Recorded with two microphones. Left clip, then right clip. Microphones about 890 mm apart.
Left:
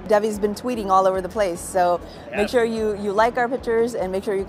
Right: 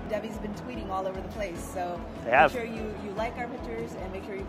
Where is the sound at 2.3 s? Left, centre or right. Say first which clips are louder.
Right 4 dB; right.